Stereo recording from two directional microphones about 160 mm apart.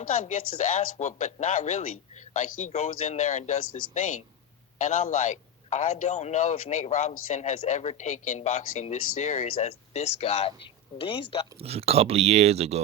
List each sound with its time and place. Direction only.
0.0 s speech: 50° left (ahead or behind); by 11.4 s 35° left (ahead or behind)
11.6 s speech: 40° right (ahead or behind)